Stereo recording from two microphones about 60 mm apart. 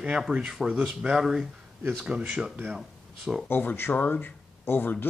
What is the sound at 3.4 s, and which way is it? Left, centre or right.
Speech, left.